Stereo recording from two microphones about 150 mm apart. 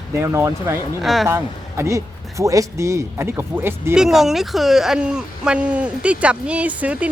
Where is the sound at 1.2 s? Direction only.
15° right (ahead or behind).